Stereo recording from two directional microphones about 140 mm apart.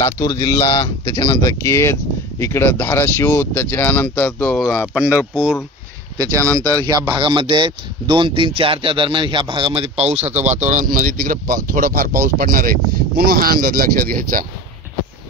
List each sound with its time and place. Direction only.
0.0 s speech: 25° left (ahead or behind)
0.7 s speech: 35° left (ahead or behind); by 4.7 s 5° left (ahead or behind)
4.9 s speech: 10° right (ahead or behind)
6.2 s speech: 20° right (ahead or behind); by 14.4 s 85° right